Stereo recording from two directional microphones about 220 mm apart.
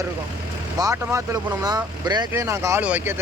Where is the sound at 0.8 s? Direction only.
15° right (ahead or behind).